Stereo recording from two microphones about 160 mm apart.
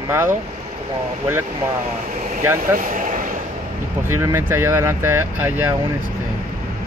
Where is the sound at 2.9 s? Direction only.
55° right (ahead or behind).